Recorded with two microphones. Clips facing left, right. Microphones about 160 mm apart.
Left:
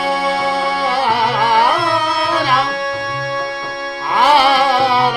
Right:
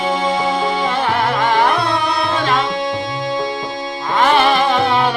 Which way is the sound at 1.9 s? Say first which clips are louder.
Left 1 dB; 20° right (ahead or behind).